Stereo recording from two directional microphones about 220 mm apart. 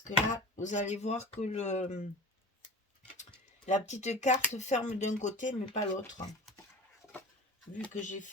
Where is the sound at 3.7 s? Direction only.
30° left (ahead or behind).